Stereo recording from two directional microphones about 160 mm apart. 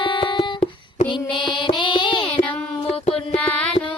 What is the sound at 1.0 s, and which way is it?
Child singing, 30° left (ahead or behind).